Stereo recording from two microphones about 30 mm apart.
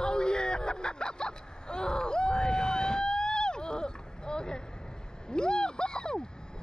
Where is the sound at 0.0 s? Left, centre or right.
Left.